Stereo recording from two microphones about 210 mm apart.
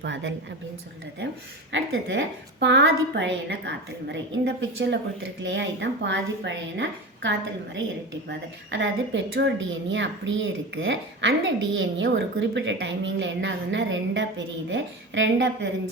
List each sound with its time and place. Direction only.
0.0 s a woman's voice: 60° right (ahead or behind)
1.7 s a woman's voice: 60° right (ahead or behind)